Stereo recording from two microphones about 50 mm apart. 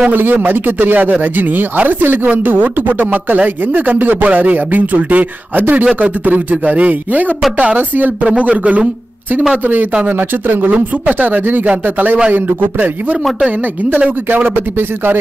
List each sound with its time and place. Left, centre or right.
0.0 s speech: right
10.0 s speech: right
13.9 s speech: right